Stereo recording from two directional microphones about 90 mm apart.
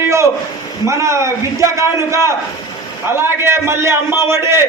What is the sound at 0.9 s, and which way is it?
A man's voice, 35° right (ahead or behind).